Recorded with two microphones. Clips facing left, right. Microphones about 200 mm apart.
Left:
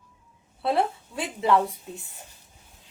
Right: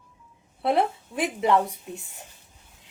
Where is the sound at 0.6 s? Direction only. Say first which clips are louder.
Right 1 dB; 20° right (ahead or behind).